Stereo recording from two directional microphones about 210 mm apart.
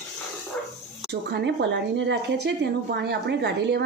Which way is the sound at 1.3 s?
55° right (ahead or behind).